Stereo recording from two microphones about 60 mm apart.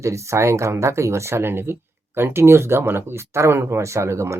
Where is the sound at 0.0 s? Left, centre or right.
Right.